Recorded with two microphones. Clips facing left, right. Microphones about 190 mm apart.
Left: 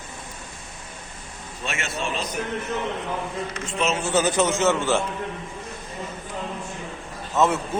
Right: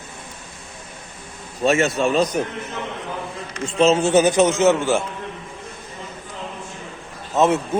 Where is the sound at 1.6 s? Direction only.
40° right (ahead or behind).